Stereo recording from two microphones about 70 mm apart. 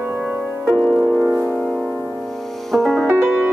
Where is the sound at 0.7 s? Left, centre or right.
Left.